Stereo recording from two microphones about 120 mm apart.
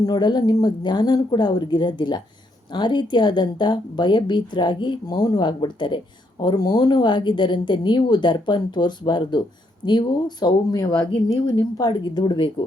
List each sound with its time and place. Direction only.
0.0 s a woman's voice: 35° left (ahead or behind)